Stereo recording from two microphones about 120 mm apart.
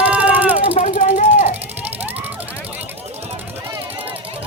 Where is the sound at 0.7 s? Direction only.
90° left.